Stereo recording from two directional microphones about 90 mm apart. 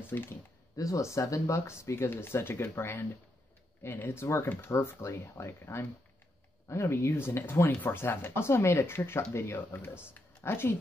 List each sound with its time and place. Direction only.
0.1 s speech: 30° left (ahead or behind)